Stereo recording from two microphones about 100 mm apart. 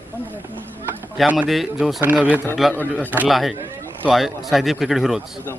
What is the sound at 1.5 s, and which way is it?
Speech, centre (ahead or behind).